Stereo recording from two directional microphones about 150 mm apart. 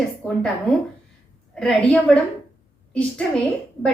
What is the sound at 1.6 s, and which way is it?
A woman's voice, 5° left (ahead or behind).